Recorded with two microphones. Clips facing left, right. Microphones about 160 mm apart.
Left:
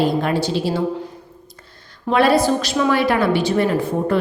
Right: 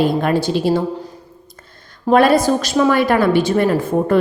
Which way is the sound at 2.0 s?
45° right (ahead or behind).